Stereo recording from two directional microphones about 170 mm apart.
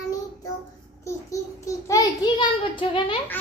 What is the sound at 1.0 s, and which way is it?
A child's voice, 20° left (ahead or behind).